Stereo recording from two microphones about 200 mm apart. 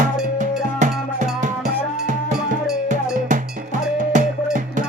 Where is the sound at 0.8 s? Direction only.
40° right (ahead or behind).